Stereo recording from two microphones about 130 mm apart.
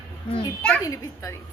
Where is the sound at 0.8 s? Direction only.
25° left (ahead or behind).